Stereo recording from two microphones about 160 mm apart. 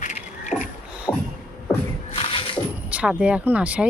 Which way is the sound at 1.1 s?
15° left (ahead or behind).